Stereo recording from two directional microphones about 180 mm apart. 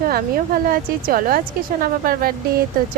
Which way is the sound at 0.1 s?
55° right (ahead or behind).